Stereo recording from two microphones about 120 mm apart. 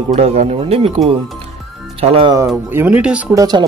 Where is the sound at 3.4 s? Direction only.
35° right (ahead or behind).